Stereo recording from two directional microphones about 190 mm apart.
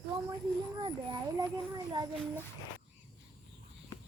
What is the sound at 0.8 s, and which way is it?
Speech, 25° right (ahead or behind).